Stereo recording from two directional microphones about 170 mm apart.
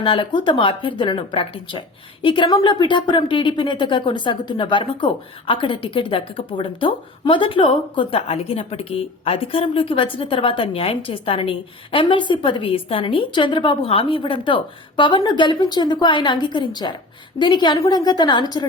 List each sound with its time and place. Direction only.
0.0 s a woman's voice: 30° left (ahead or behind)